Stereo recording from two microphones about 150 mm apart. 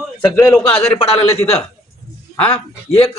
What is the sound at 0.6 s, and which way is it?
Speech, 35° left (ahead or behind).